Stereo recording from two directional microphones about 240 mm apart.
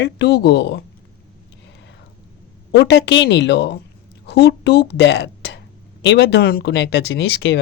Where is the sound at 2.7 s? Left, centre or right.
Left.